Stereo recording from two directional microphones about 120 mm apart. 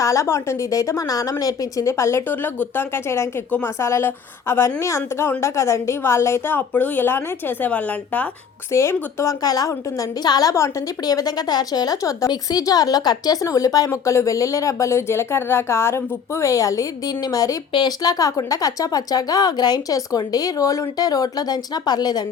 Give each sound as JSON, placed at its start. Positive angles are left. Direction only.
{"t": 0.0, "sound": "a woman's voice", "side_deg": 25}
{"t": 8.7, "sound": "a woman's voice", "side_deg": 25}